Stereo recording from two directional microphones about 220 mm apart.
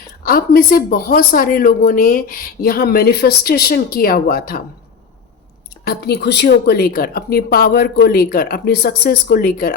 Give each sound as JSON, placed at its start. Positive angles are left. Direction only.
{"t": 0.3, "sound": "speech", "side_deg": 40}
{"t": 5.8, "sound": "speech", "side_deg": 45}